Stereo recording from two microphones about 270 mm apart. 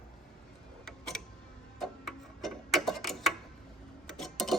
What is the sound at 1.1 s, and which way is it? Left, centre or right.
Music, centre.